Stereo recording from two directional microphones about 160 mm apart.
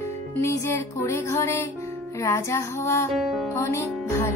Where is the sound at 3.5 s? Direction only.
15° left (ahead or behind).